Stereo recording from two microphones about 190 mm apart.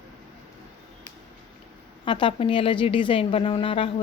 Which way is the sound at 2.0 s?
25° left (ahead or behind).